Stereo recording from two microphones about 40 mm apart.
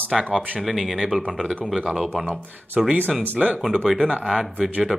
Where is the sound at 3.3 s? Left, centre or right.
Right.